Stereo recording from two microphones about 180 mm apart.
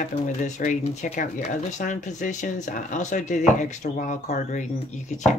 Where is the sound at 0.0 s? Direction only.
45° left (ahead or behind).